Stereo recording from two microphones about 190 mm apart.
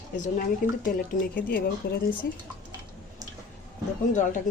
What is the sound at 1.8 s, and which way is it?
Speech, 65° left (ahead or behind).